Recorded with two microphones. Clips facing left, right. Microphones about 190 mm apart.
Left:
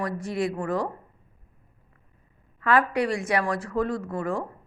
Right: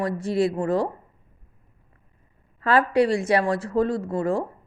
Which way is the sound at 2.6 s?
30° right (ahead or behind).